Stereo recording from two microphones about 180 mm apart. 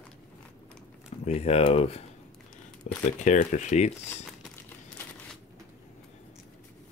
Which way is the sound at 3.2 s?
40° left (ahead or behind).